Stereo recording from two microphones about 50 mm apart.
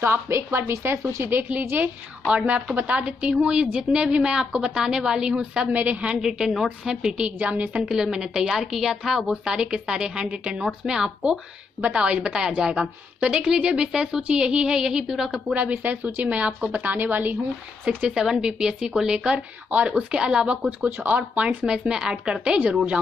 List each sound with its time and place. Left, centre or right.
0.0 s a woman's voice: right
1.5 s a woman's voice: right
2.2 s a woman's voice: right
5.7 s a woman's voice: right
6.2 s speech: centre
7.3 s a woman's voice: right
7.8 s a woman's voice: centre
15.5 s a woman's voice: right
18.0 s speech: centre
19.3 s a woman's voice: right
20.8 s a woman's voice: right
21.6 s speech: centre